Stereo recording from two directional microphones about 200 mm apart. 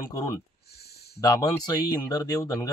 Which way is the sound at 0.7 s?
55° left (ahead or behind).